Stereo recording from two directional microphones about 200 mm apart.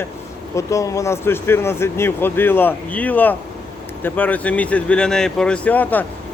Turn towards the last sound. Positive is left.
turn(degrees=10)  # may be behind; listen again after turning